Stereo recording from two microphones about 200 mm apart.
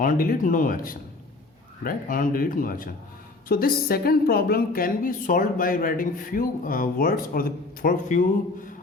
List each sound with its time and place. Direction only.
0.0 s a woman's voice: 45° left (ahead or behind)